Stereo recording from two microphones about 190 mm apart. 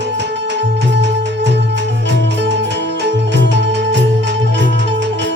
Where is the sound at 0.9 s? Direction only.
70° right (ahead or behind).